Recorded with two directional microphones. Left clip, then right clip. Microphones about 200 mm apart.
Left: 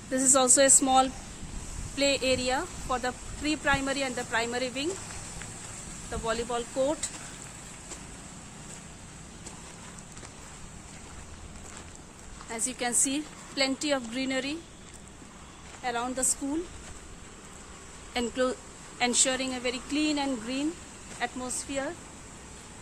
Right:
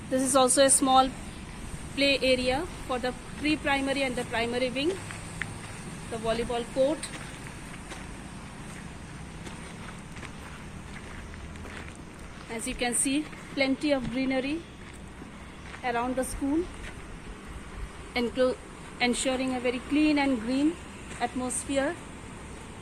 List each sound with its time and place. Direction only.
0.1 s speech: 55° left (ahead or behind)
2.0 s speech: 30° left (ahead or behind)
6.2 s speech: 30° left (ahead or behind)
12.6 s speech: 30° left (ahead or behind)
15.8 s speech: 25° left (ahead or behind)
18.1 s speech: 45° left (ahead or behind)
18.9 s speech: 25° left (ahead or behind)
21.2 s speech: 15° right (ahead or behind)